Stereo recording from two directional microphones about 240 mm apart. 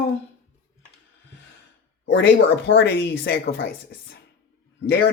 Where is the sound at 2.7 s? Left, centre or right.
Left.